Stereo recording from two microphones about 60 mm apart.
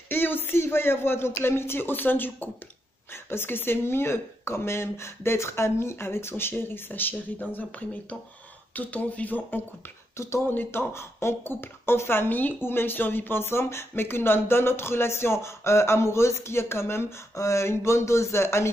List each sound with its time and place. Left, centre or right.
0.1 s speech: left
10.1 s speech: left
10.4 s speech: left